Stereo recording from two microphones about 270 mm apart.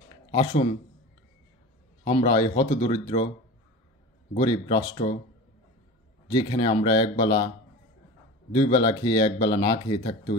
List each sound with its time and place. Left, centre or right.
0.1 s a sound: centre
2.0 s speech: centre
4.4 s speech: centre
6.2 s speech: centre